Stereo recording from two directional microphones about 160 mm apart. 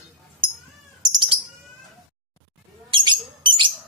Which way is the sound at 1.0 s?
25° right (ahead or behind).